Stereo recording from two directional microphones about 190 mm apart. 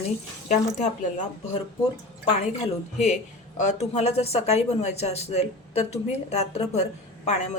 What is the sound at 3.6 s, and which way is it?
Speech, 35° left (ahead or behind).